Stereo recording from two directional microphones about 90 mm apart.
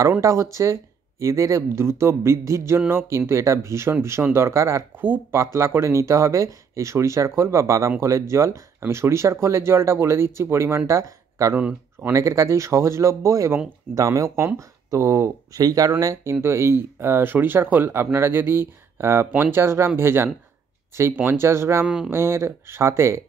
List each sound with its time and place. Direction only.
0.2 s speech: 35° right (ahead or behind)
11.5 s speech: 20° right (ahead or behind)
12.1 s speech: 35° right (ahead or behind)
21.8 s speech: 10° right (ahead or behind)
22.1 s speech: 30° right (ahead or behind)